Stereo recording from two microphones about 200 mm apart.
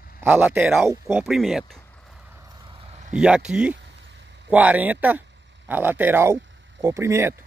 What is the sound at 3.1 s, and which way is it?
Speech, 5° right (ahead or behind).